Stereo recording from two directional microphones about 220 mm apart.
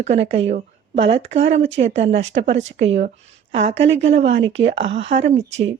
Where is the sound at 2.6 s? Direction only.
55° right (ahead or behind).